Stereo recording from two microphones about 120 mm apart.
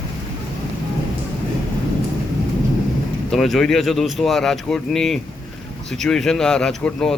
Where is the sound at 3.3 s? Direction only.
5° left (ahead or behind).